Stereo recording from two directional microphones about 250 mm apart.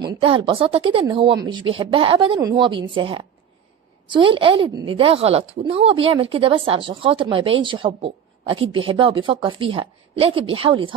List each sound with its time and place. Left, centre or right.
0.0 s a woman's voice: right